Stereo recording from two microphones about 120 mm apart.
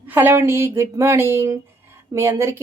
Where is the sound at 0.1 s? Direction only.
15° right (ahead or behind).